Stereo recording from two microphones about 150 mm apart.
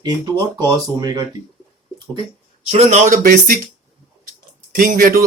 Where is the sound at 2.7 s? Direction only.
50° right (ahead or behind); by 3.5 s 65° right (ahead or behind).